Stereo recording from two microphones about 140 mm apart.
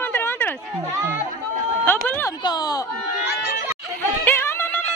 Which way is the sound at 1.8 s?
15° left (ahead or behind).